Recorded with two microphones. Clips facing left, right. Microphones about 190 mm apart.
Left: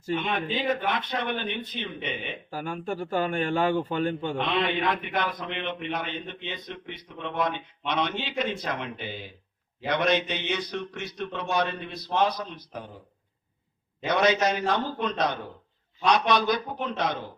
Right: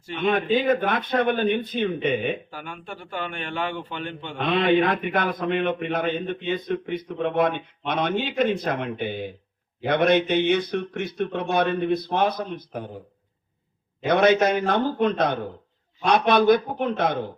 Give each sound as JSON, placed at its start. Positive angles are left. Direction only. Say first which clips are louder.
{"t": 0.3, "sound": "a man's voice", "louder": "right 12 dB", "side_deg": -50}
{"t": 2.5, "sound": "speech", "louder": "left 5 dB", "side_deg": 40}
{"t": 4.4, "sound": "a man's voice", "louder": "right 11 dB", "side_deg": -50}
{"t": 14.0, "sound": "a man's voice", "louder": "right 5 dB", "side_deg": -55}